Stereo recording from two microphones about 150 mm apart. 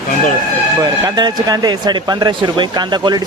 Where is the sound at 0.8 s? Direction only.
25° right (ahead or behind).